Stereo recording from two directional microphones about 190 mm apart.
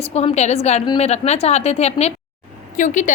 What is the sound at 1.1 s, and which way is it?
A woman's voice, 35° left (ahead or behind).